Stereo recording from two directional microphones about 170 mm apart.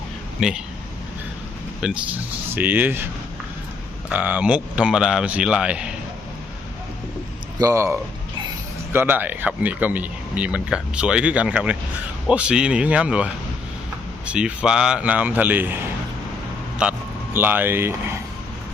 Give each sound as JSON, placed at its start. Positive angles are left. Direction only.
{"t": 0.3, "sound": "a man's voice", "side_deg": -5}
{"t": 1.8, "sound": "a man's voice", "side_deg": -5}
{"t": 4.1, "sound": "a man's voice", "side_deg": -10}
{"t": 7.6, "sound": "speech", "side_deg": -15}
{"t": 17.3, "sound": "speech", "side_deg": -10}